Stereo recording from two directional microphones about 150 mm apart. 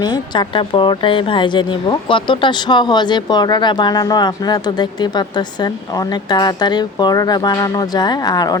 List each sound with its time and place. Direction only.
0.0 s speech: 30° left (ahead or behind)